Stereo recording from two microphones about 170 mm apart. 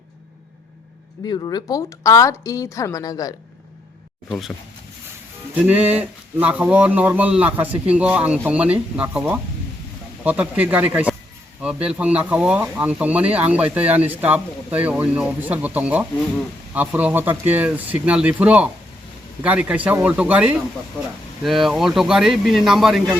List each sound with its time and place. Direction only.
1.3 s a woman's voice: 25° left (ahead or behind)
4.3 s speech: centre (ahead or behind)
5.5 s speech: 10° right (ahead or behind)